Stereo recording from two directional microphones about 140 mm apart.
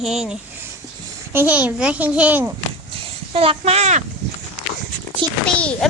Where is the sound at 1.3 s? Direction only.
10° right (ahead or behind).